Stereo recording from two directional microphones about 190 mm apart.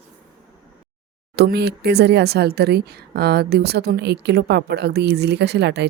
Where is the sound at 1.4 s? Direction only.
60° right (ahead or behind).